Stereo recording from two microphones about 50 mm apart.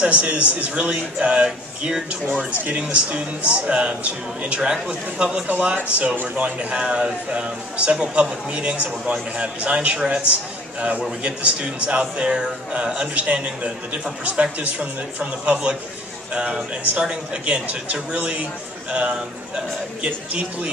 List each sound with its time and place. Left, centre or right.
0.0 s a man's voice: right
5.9 s a man's voice: right
15.5 s a man's voice: centre